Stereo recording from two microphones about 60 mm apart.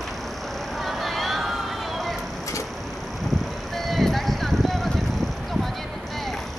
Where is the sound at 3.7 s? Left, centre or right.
Centre.